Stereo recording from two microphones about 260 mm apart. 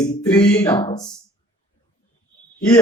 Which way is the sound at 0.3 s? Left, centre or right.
Centre.